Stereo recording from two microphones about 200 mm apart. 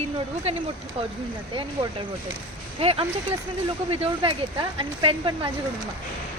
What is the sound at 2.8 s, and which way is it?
Speech, 30° right (ahead or behind).